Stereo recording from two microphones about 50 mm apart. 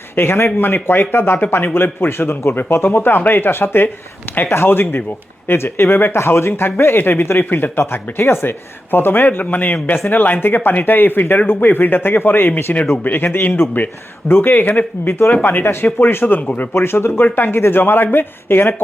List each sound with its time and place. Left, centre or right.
0.2 s speech: left
8.2 s a man's voice: left
13.5 s speech: left
16.4 s a man's voice: left
16.7 s speech: left